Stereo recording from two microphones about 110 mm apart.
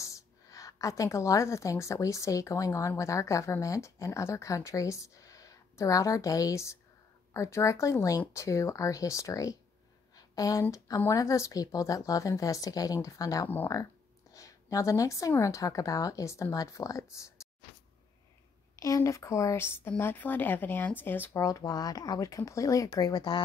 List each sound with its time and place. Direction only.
0.0 s a woman's voice: 30° left (ahead or behind)
18.8 s speech: 30° left (ahead or behind)
21.4 s a woman's voice: 30° left (ahead or behind)